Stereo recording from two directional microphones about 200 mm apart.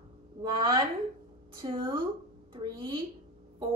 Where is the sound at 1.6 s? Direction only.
25° right (ahead or behind).